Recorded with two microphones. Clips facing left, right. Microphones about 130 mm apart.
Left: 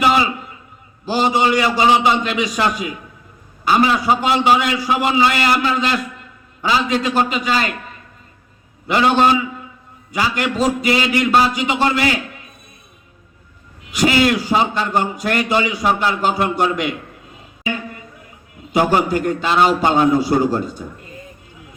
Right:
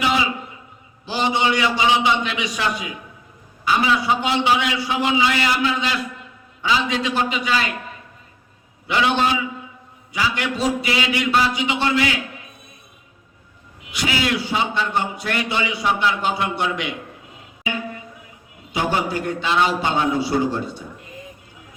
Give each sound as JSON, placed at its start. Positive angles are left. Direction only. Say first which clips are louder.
{"t": 0.0, "sound": "a sound", "louder": "left 5 dB", "side_deg": 50}
{"t": 1.0, "sound": "a man's voice", "louder": "left 4 dB", "side_deg": 40}
{"t": 8.9, "sound": "a man's voice", "louder": "left 5 dB", "side_deg": 45}
{"t": 13.9, "sound": "a man's voice", "louder": "left 7 dB", "side_deg": 45}
{"t": 18.7, "sound": "a man's voice", "louder": "left 6 dB", "side_deg": 45}